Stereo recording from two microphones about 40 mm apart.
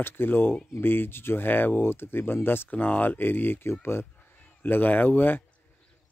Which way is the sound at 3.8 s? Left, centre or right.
Left.